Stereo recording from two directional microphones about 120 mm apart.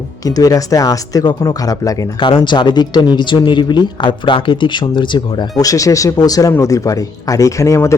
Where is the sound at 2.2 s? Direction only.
40° left (ahead or behind).